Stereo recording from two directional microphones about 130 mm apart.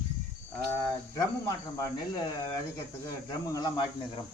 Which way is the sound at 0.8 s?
25° left (ahead or behind).